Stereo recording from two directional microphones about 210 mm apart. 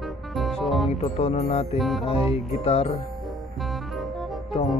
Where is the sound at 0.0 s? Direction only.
Centre (ahead or behind).